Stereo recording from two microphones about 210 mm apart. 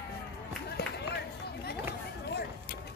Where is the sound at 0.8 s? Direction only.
50° left (ahead or behind).